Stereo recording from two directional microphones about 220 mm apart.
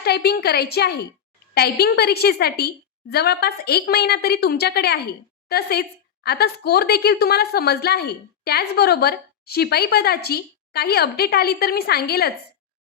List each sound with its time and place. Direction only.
0.0 s a woman's voice: 45° left (ahead or behind)